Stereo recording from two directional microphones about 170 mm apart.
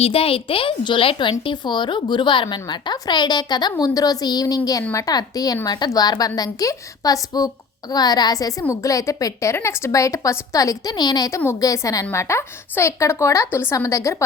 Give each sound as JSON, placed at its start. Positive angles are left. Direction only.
{"t": 0.0, "sound": "a woman's voice", "side_deg": 35}